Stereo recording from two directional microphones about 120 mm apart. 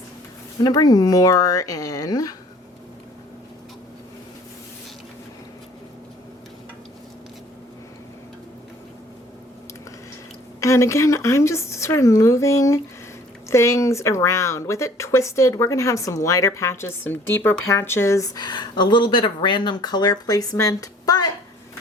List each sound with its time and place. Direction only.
0.6 s speech: 35° left (ahead or behind)
10.6 s speech: 25° left (ahead or behind)